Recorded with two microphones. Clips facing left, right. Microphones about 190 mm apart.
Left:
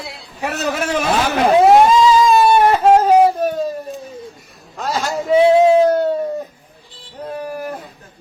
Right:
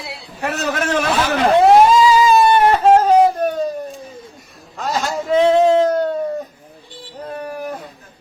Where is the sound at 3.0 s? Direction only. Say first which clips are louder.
Left 1 dB; 5° left (ahead or behind).